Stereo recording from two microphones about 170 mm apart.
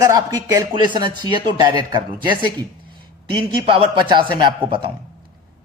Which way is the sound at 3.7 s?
30° right (ahead or behind).